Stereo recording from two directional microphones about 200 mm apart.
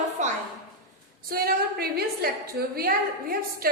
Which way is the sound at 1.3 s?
50° right (ahead or behind).